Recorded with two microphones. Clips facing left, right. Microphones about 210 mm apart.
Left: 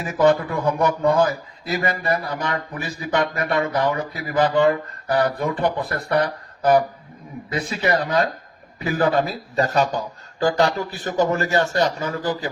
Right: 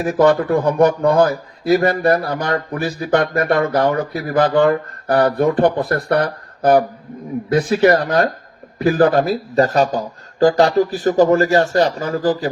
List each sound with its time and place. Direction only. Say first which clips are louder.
0.0 s a man's voice: right 4 dB; 55° right (ahead or behind); by 12.5 s 35° right (ahead or behind)